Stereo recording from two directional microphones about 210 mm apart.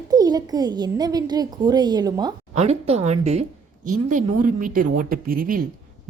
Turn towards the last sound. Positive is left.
turn(degrees=-45)  # may be behind; listen again after turning